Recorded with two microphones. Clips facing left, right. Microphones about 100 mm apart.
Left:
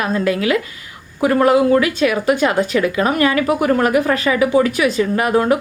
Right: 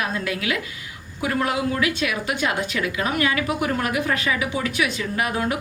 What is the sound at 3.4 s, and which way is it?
Speech, 60° left (ahead or behind).